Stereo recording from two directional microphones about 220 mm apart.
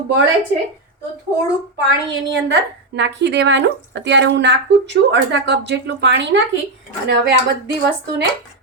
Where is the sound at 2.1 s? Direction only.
50° right (ahead or behind).